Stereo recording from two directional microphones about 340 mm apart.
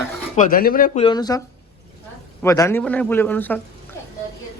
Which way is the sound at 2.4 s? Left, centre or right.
Centre.